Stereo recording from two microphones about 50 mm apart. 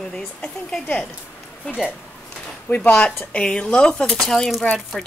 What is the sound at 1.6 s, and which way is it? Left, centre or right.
Speech, centre.